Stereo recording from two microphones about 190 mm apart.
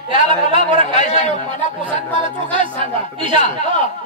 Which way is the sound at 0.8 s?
40° left (ahead or behind).